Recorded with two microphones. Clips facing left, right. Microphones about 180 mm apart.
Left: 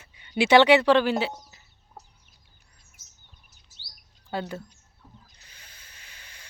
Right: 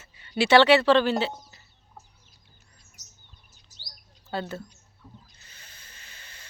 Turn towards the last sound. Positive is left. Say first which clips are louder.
# right 1 dB
turn(degrees=10)  # may be behind; listen again after turning